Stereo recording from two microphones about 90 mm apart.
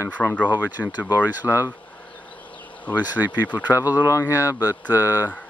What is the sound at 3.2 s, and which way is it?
Speech, 20° right (ahead or behind).